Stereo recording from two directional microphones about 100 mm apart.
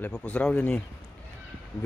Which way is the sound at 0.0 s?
15° left (ahead or behind).